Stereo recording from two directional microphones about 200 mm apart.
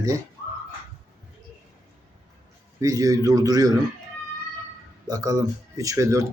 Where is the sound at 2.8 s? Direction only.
20° right (ahead or behind).